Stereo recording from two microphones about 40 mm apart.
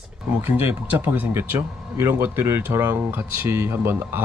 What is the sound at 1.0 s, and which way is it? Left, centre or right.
Speech, right.